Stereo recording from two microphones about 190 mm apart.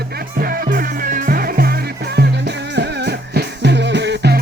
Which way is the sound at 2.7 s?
65° right (ahead or behind).